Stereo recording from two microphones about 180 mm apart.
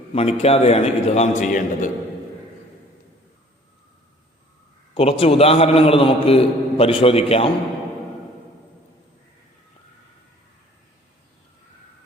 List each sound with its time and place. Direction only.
0.1 s a man's voice: 35° left (ahead or behind)
4.9 s a man's voice: 30° left (ahead or behind)